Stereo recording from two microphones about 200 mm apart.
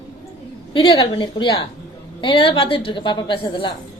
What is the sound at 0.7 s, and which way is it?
A woman's voice, 20° left (ahead or behind).